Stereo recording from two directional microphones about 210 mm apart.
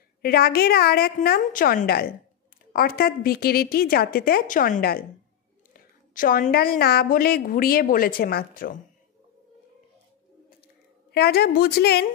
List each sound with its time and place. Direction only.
0.2 s a woman's voice: 45° left (ahead or behind)
11.1 s a woman's voice: 50° left (ahead or behind)